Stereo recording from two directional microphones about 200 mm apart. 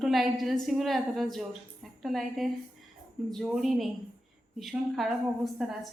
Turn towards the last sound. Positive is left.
turn(degrees=0)  # may be behind; listen again after turning